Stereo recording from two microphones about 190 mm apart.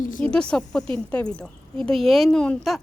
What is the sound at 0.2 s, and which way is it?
A woman's voice, 5° left (ahead or behind).